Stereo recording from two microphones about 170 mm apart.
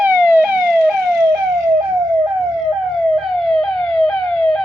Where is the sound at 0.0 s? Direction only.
10° right (ahead or behind).